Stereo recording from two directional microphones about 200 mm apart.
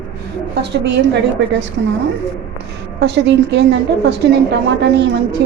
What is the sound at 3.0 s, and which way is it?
Speech, 60° right (ahead or behind).